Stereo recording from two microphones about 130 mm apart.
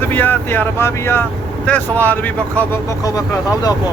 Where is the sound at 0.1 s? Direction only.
15° left (ahead or behind).